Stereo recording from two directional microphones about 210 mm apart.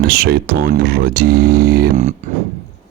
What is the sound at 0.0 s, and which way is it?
Speech, 45° right (ahead or behind).